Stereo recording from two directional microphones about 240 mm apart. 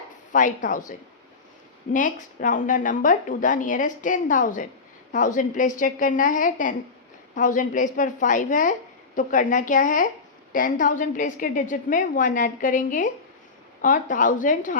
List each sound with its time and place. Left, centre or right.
0.3 s a woman's voice: left
1.9 s a woman's voice: left